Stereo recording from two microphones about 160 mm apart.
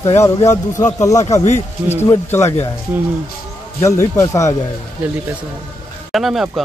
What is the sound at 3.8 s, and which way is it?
Speech, 20° left (ahead or behind).